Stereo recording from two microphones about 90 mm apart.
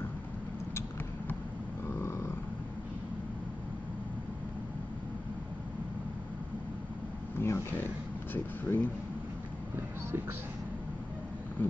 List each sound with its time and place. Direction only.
2.0 s snoring: 30° left (ahead or behind)
7.3 s speech: 30° left (ahead or behind)